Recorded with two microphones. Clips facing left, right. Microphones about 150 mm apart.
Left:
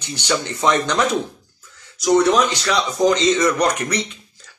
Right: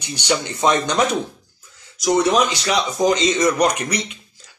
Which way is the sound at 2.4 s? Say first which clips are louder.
Even; 20° right (ahead or behind).